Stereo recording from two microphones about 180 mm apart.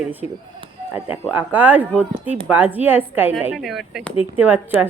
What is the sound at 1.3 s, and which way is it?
A woman's voice, 10° right (ahead or behind).